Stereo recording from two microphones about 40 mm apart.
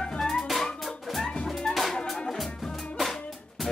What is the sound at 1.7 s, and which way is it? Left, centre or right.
Music, centre.